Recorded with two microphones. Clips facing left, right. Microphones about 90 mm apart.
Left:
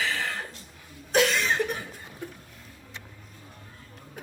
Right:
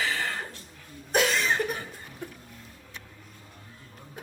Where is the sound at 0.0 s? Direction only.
Centre (ahead or behind).